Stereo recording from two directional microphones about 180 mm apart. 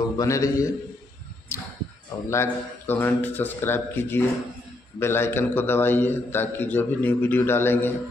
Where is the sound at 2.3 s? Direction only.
15° left (ahead or behind).